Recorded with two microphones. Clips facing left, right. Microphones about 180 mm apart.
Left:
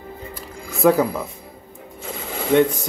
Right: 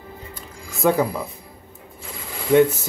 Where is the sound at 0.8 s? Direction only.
Centre (ahead or behind).